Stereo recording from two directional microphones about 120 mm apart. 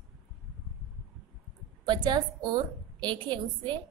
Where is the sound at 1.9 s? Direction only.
40° right (ahead or behind).